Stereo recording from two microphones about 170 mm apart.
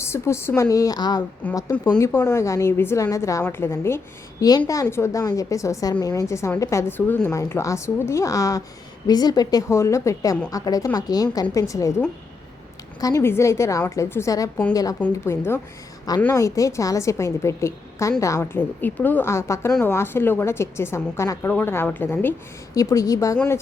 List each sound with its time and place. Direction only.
0.0 s a woman's voice: 15° left (ahead or behind)
1.4 s a woman's voice: 10° left (ahead or behind)